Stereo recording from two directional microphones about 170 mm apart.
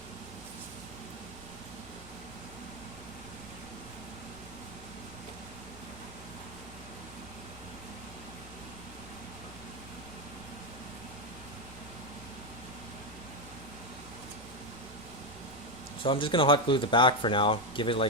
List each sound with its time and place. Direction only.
16.0 s speech: 30° left (ahead or behind)